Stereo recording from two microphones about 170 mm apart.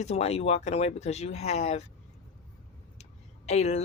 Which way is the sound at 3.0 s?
40° left (ahead or behind).